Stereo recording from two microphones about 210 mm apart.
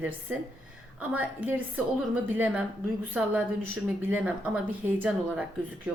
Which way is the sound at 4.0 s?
10° right (ahead or behind).